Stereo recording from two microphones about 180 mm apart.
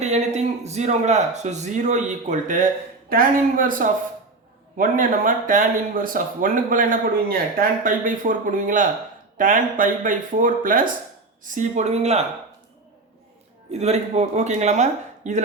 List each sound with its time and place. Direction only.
0.0 s a man's voice: 40° right (ahead or behind)
3.1 s a man's voice: 50° right (ahead or behind)
13.7 s a man's voice: 35° right (ahead or behind)